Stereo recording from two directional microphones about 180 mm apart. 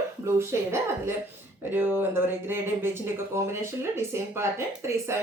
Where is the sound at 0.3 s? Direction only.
15° right (ahead or behind).